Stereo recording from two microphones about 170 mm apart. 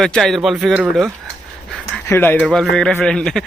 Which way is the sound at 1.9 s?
10° left (ahead or behind).